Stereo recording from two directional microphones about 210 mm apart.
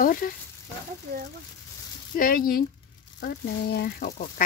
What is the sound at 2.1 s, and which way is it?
Speech, 45° left (ahead or behind).